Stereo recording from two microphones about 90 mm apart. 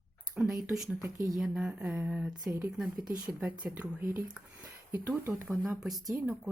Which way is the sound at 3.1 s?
25° right (ahead or behind).